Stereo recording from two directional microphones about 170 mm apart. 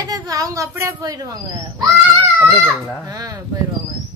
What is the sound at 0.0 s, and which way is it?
Speech, 20° right (ahead or behind).